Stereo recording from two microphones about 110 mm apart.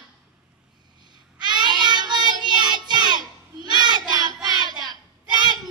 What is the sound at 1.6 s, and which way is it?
Child singing, 40° right (ahead or behind).